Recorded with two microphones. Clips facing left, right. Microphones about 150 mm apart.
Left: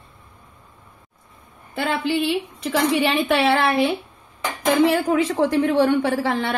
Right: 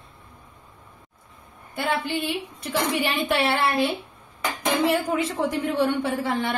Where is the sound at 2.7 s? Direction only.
90° left.